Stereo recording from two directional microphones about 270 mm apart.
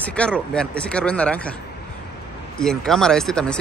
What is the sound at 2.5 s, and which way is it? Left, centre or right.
Speech, centre.